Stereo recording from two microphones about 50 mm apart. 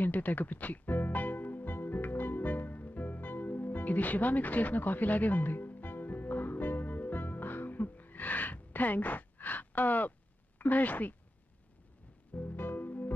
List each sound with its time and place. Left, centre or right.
0.0 s music: left
10.6 s speech: left
12.4 s music: left